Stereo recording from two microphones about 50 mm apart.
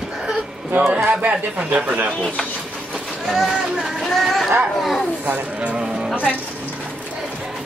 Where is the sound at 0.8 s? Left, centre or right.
Right.